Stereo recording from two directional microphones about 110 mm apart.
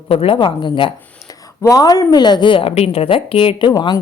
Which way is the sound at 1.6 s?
30° left (ahead or behind).